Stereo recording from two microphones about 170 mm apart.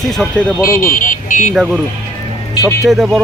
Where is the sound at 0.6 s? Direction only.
15° left (ahead or behind).